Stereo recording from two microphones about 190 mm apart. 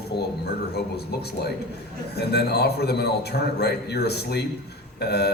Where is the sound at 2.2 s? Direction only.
60° left (ahead or behind).